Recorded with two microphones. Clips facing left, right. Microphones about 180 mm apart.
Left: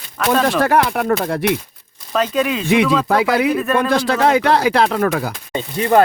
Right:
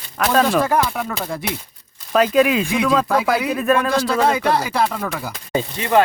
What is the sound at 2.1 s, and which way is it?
Speech, 5° right (ahead or behind).